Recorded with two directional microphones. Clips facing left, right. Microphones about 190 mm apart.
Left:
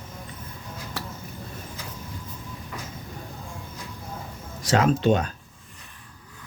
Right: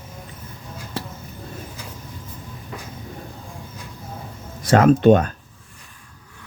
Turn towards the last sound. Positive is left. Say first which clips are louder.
# right 7 dB
turn(degrees=-55)  # may be behind; listen again after turning